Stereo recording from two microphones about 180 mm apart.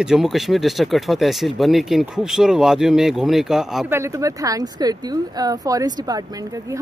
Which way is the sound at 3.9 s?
15° right (ahead or behind).